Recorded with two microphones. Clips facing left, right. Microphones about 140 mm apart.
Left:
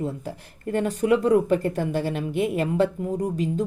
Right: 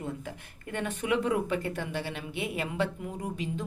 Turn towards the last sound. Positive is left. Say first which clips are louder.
# left 9 dB
turn(degrees=40)  # may be behind; listen again after turning